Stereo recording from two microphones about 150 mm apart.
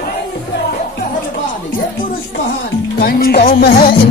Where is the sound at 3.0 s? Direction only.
90° left.